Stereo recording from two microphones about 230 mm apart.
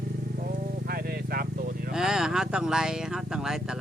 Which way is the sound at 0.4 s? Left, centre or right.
Right.